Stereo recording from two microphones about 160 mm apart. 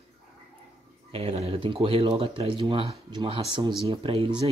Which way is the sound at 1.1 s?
40° right (ahead or behind).